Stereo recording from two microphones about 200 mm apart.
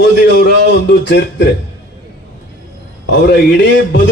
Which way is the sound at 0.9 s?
60° left (ahead or behind).